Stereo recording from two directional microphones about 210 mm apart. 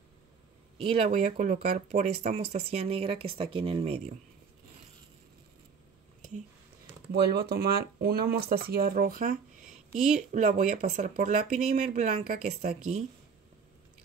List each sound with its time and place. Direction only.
0.7 s speech: 25° right (ahead or behind)
7.1 s speech: 50° right (ahead or behind); by 13.0 s 30° right (ahead or behind)